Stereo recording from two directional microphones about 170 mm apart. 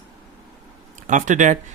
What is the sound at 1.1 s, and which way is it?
Speech, 45° right (ahead or behind).